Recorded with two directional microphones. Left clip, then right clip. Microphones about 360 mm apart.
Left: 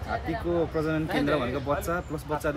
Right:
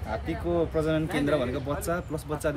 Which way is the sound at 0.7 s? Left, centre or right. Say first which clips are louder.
Right 2 dB; centre.